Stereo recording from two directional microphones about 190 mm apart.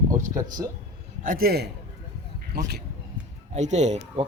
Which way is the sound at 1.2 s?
50° right (ahead or behind).